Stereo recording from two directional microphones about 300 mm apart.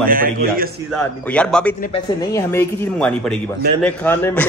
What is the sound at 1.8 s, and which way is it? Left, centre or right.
A man's voice, centre.